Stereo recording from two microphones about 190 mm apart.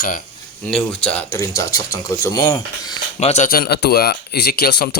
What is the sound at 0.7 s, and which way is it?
Speech, 5° left (ahead or behind).